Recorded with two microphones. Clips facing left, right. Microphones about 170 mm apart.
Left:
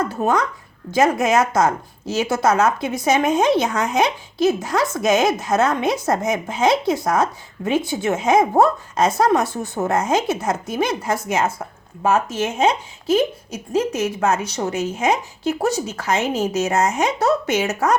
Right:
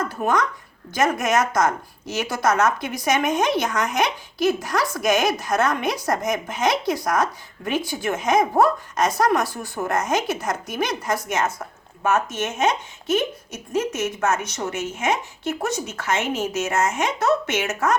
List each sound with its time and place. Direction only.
0.2 s a woman's voice: 30° left (ahead or behind)